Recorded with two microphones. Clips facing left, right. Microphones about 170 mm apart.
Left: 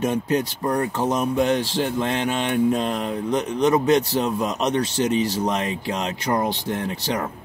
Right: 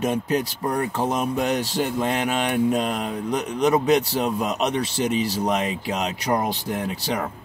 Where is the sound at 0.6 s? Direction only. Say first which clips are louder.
Left 2 dB; 20° right (ahead or behind).